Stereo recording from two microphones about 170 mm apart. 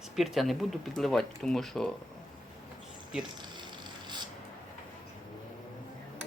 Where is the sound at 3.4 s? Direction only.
25° right (ahead or behind).